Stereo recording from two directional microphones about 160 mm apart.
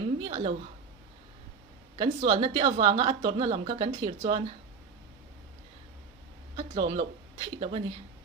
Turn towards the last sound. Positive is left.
turn(degrees=-35)  # may be behind; listen again after turning